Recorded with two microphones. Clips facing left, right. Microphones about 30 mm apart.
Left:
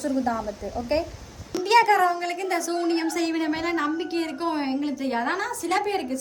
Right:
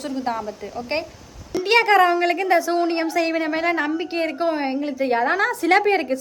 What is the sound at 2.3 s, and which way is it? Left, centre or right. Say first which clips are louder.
Speech: right 8 dB; right.